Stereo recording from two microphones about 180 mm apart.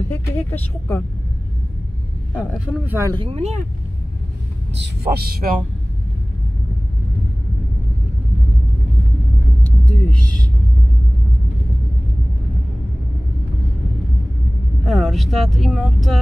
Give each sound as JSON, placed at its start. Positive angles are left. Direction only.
{"t": 0.1, "sound": "speech", "side_deg": 10}
{"t": 2.3, "sound": "speech", "side_deg": -10}
{"t": 3.1, "sound": "speech", "side_deg": -30}
{"t": 4.7, "sound": "speech", "side_deg": -70}
{"t": 9.6, "sound": "a sound", "side_deg": 10}
{"t": 14.9, "sound": "speech", "side_deg": 0}